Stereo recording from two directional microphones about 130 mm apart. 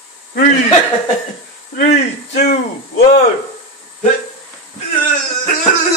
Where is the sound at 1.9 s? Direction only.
65° left (ahead or behind).